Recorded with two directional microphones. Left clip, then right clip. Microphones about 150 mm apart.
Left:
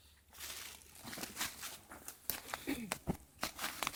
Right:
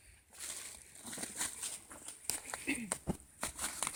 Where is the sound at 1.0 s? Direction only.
80° right.